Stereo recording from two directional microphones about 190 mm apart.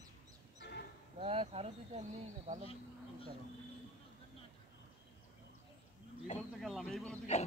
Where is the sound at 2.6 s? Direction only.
30° left (ahead or behind).